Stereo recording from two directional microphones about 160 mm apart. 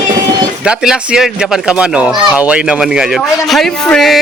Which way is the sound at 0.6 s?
5° right (ahead or behind).